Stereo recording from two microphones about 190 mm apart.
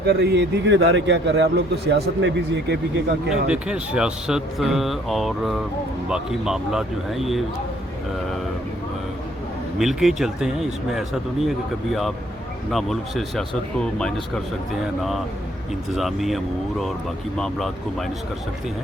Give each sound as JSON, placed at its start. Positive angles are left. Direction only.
{"t": 0.0, "sound": "a man's voice", "side_deg": -60}
{"t": 3.2, "sound": "speech", "side_deg": -5}
{"t": 9.7, "sound": "speech", "side_deg": 0}
{"t": 12.7, "sound": "speech", "side_deg": 0}
{"t": 16.0, "sound": "speech", "side_deg": 0}